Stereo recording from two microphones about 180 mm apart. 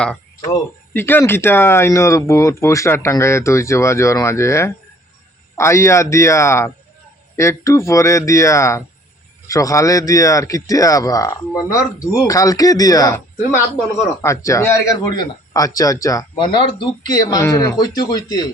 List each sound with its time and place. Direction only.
0.4 s speech: 15° left (ahead or behind)
14.2 s speech: 15° left (ahead or behind)